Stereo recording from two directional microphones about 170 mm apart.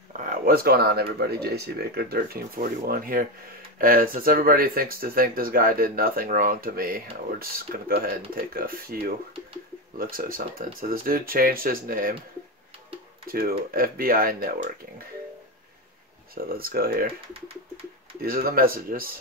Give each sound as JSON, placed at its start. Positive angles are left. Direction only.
{"t": 0.2, "sound": "speech", "side_deg": -55}
{"t": 13.3, "sound": "speech", "side_deg": -60}
{"t": 16.4, "sound": "speech", "side_deg": -60}
{"t": 18.2, "sound": "speech", "side_deg": -60}